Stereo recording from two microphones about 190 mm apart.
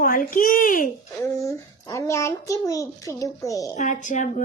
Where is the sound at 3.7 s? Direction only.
40° left (ahead or behind).